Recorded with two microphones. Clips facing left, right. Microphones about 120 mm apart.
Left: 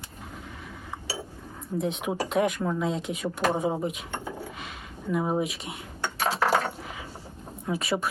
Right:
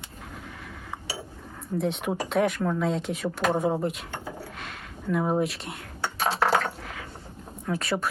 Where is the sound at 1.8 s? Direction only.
Centre (ahead or behind).